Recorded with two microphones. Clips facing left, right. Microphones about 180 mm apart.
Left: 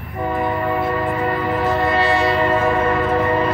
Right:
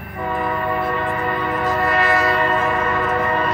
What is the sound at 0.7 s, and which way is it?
Music, 5° left (ahead or behind).